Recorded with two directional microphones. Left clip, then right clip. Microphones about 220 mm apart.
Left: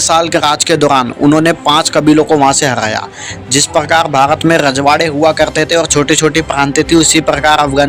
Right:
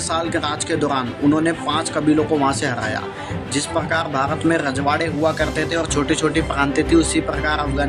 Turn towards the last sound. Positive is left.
turn(degrees=35)  # may be behind; listen again after turning